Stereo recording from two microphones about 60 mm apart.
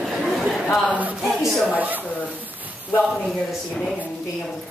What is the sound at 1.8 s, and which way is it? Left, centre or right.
Speech, right.